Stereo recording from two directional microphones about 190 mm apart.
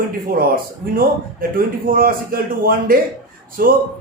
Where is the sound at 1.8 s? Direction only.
50° right (ahead or behind).